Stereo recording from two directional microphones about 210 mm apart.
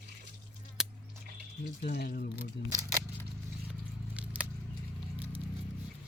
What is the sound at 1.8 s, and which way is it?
Speech, 45° left (ahead or behind).